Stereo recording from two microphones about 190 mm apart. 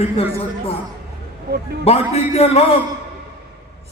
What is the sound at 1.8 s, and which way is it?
Speech, 30° left (ahead or behind).